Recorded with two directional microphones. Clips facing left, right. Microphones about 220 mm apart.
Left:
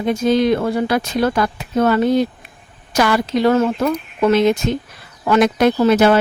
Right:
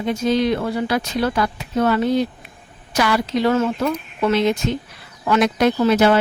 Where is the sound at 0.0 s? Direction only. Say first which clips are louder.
Left 3 dB; 50° left (ahead or behind).